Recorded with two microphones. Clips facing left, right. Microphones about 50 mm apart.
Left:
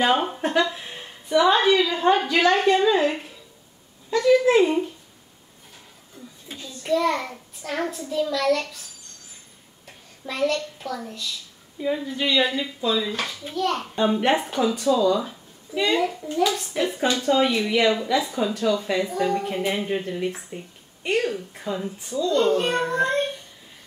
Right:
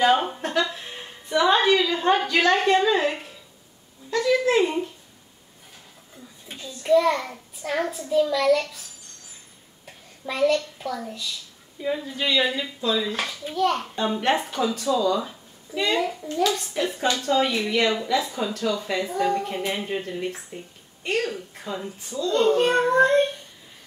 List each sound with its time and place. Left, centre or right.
0.0 s a woman's voice: centre
0.4 s a sound: centre
1.4 s a woman's voice: centre
6.6 s a woman's voice: centre
9.8 s a child's voice: centre
13.9 s a woman's voice: centre
22.3 s a woman's voice: centre
22.7 s a child's voice: centre